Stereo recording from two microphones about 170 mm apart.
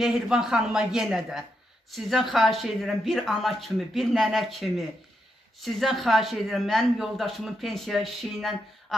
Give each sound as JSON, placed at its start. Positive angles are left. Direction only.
{"t": 0.0, "sound": "speech", "side_deg": -5}